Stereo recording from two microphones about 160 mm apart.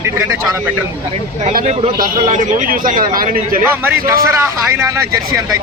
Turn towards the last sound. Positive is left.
turn(degrees=-20)  # may be behind; listen again after turning